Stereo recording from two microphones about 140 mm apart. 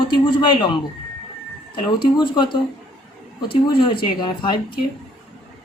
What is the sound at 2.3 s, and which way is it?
Speech, 35° left (ahead or behind).